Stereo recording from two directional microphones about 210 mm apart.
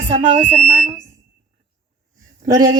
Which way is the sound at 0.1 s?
35° right (ahead or behind).